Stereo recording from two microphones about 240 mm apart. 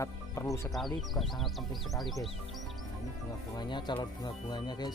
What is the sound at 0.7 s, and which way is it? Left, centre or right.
Speech, centre.